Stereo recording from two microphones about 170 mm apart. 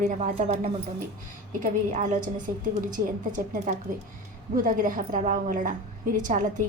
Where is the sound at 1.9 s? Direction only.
50° right (ahead or behind).